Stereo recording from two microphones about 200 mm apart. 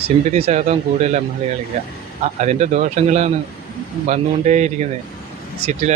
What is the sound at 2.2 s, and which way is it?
A man's voice, 35° right (ahead or behind).